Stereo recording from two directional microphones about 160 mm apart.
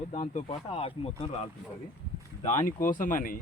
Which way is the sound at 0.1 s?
40° left (ahead or behind).